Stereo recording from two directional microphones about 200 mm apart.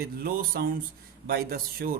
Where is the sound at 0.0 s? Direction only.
50° right (ahead or behind).